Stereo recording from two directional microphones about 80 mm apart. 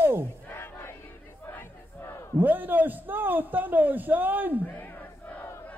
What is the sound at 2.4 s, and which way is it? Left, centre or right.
A man's voice, right.